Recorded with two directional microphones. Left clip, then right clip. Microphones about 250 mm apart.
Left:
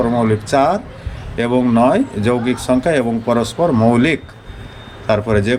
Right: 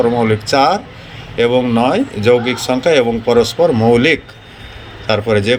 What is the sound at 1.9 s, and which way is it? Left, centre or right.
A man's voice, centre.